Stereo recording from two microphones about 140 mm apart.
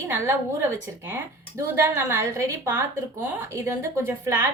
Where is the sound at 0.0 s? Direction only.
20° right (ahead or behind).